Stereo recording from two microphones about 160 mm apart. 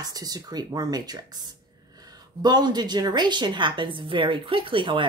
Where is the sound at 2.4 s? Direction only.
25° right (ahead or behind).